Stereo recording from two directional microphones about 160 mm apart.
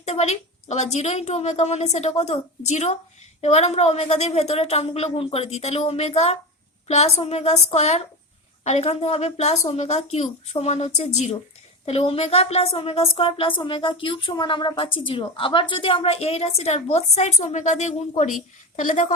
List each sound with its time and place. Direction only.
0.0 s a woman's voice: 45° left (ahead or behind)